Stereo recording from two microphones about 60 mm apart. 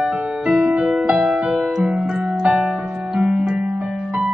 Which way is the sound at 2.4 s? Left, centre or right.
Centre.